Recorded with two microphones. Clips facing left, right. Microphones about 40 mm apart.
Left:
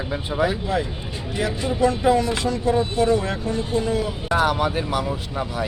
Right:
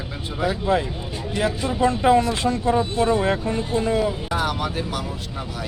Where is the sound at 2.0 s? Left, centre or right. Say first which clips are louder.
Right 1 dB; right.